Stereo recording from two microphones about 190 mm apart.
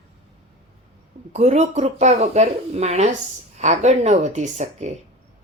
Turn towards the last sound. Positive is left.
turn(degrees=-40)  # may be behind; listen again after turning